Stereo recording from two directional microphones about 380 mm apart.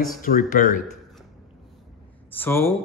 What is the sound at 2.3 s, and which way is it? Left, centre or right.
Speech, centre.